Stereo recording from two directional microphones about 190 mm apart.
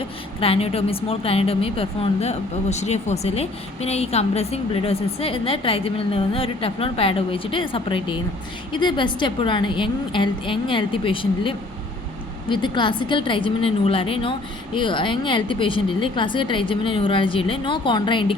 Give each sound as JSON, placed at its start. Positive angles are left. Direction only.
{"t": 0.3, "sound": "a woman's voice", "side_deg": 30}